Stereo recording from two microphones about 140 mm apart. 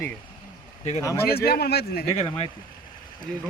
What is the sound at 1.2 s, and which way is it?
Speech, 90° left.